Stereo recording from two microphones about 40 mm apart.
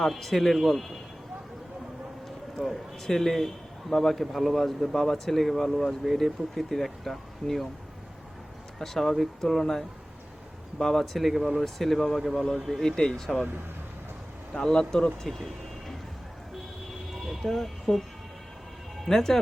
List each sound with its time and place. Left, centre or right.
0.0 s a man's voice: centre
2.6 s a man's voice: centre
8.8 s a man's voice: centre
12.8 s speech: centre
14.5 s speech: centre
17.2 s speech: centre
19.0 s speech: centre